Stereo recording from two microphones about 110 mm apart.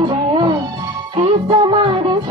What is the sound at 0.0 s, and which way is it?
Music, 45° right (ahead or behind).